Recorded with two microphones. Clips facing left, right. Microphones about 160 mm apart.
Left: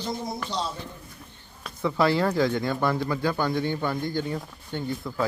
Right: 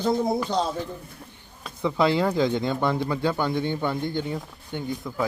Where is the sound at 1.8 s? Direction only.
20° right (ahead or behind).